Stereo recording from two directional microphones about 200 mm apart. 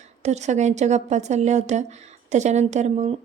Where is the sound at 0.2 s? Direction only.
35° right (ahead or behind).